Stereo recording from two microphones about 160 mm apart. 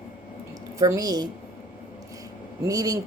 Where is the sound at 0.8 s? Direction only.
20° right (ahead or behind).